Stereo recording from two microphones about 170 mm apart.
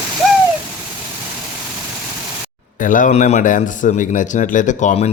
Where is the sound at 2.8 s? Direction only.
50° left (ahead or behind).